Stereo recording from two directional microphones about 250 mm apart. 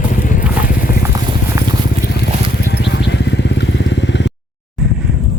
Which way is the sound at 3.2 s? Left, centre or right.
Left.